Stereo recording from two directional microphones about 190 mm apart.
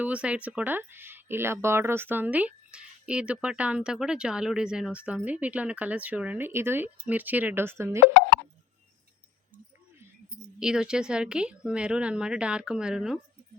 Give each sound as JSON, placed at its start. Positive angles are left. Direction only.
{"t": 0.0, "sound": "speech", "side_deg": -5}
{"t": 10.6, "sound": "speech", "side_deg": -5}